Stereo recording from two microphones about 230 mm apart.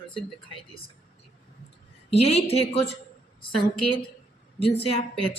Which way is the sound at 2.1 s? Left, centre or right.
Left.